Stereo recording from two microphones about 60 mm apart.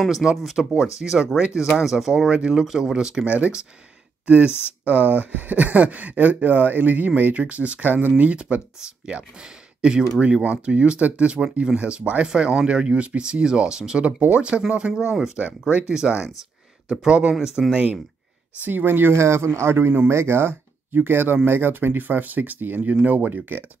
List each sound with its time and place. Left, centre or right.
0.2 s speech: centre
3.3 s speech: right
15.4 s speech: right
18.6 s speech: right
19.2 s speech: right